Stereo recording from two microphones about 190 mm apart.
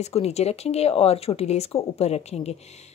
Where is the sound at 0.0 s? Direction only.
35° left (ahead or behind).